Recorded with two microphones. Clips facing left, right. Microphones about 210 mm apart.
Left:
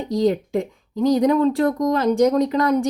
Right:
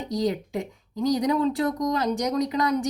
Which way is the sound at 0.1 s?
55° left (ahead or behind).